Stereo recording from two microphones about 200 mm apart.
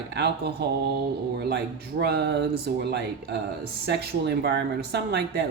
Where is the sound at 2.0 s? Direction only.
55° right (ahead or behind).